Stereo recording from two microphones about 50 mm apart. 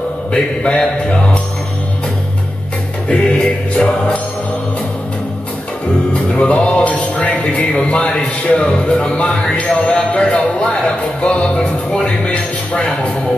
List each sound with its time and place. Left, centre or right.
0.3 s speech: centre
3.1 s music: centre
6.3 s speech: left